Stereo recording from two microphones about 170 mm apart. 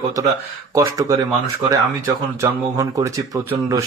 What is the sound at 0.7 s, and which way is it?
Speech, 20° right (ahead or behind).